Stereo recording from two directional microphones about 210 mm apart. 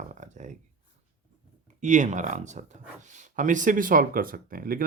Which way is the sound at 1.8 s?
35° right (ahead or behind).